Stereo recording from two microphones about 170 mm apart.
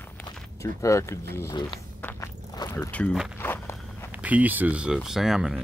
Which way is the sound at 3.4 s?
15° left (ahead or behind).